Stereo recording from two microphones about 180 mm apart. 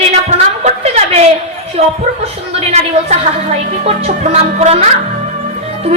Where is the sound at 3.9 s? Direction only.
35° right (ahead or behind).